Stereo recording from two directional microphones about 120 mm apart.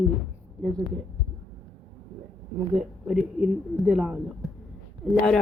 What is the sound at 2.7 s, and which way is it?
Speech, 5° right (ahead or behind).